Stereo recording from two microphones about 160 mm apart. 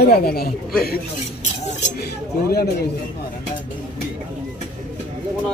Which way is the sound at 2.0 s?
75° left (ahead or behind).